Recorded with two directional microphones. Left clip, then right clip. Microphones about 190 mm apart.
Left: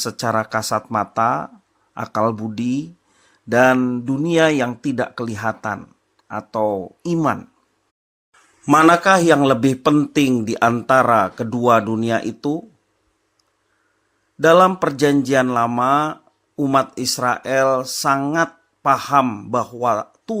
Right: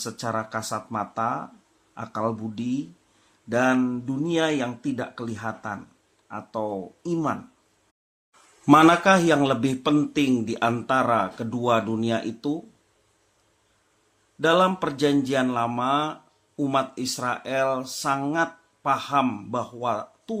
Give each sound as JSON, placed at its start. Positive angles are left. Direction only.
{"t": 0.0, "sound": "a man's voice", "side_deg": 40}
{"t": 8.7, "sound": "a man's voice", "side_deg": 25}
{"t": 14.4, "sound": "a man's voice", "side_deg": 40}